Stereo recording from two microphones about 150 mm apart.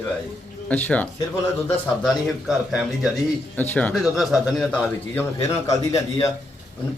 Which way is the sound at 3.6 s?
10° left (ahead or behind).